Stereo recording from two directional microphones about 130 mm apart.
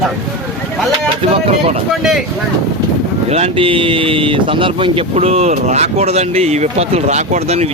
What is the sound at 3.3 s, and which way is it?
Speech, 50° right (ahead or behind).